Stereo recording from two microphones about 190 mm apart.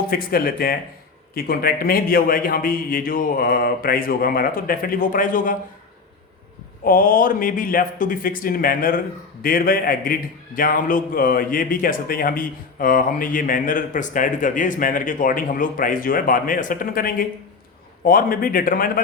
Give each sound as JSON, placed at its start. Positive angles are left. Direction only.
{"t": 0.1, "sound": "a man's voice", "side_deg": 50}
{"t": 6.8, "sound": "a man's voice", "side_deg": 45}